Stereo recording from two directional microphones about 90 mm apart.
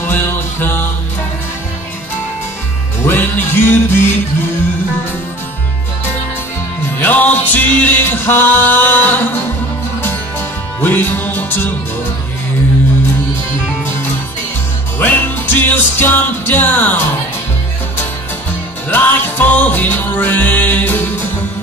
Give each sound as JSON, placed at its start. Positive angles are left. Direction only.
{"t": 0.0, "sound": "music", "side_deg": 20}
{"t": 3.1, "sound": "music", "side_deg": 25}
{"t": 7.0, "sound": "music", "side_deg": 20}
{"t": 10.8, "sound": "music", "side_deg": 20}
{"t": 15.0, "sound": "music", "side_deg": 20}
{"t": 18.9, "sound": "music", "side_deg": 20}